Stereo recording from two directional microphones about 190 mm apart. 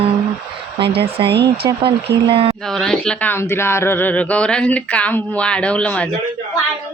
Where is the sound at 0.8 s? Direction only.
60° right (ahead or behind).